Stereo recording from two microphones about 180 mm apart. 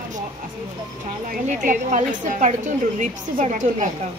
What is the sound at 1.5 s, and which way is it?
A woman's voice, 45° right (ahead or behind).